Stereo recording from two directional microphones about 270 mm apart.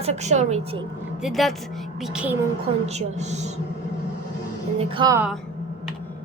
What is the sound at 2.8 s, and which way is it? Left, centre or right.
Speech, right.